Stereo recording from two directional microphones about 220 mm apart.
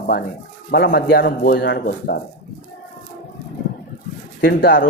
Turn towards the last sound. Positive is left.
turn(degrees=40)  # may be behind; listen again after turning